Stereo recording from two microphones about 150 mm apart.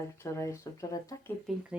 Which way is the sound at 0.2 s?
20° left (ahead or behind).